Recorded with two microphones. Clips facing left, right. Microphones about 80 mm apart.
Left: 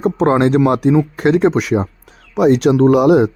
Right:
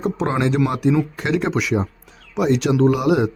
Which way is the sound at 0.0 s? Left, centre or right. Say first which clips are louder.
Left 7 dB; left.